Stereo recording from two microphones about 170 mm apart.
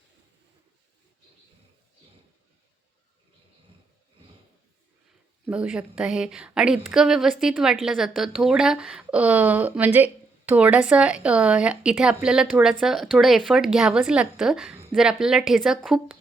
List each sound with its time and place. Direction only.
5.5 s a woman's voice: 5° right (ahead or behind)